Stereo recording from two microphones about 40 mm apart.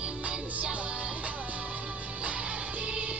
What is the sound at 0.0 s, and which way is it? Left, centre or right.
Music, right.